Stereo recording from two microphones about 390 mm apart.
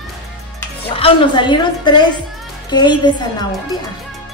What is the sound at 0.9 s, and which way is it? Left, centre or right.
A woman's voice, centre.